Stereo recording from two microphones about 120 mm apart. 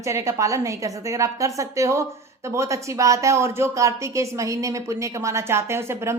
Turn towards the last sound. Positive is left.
turn(degrees=-20)  # may be behind; listen again after turning